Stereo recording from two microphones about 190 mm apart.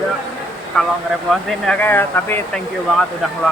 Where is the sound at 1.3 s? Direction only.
Centre (ahead or behind).